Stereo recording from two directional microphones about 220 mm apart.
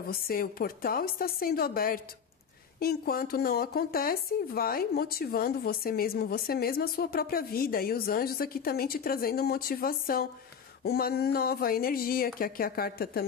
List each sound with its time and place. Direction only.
0.1 s speech: 40° left (ahead or behind)